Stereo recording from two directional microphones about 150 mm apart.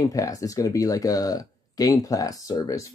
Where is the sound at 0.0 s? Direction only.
25° left (ahead or behind).